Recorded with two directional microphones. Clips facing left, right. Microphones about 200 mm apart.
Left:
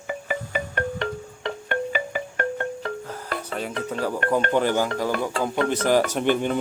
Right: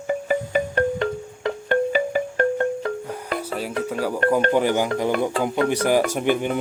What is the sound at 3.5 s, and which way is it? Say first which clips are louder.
Speech: right 2 dB; 5° right (ahead or behind).